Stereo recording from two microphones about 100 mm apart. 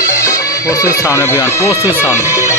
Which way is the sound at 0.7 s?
35° left (ahead or behind).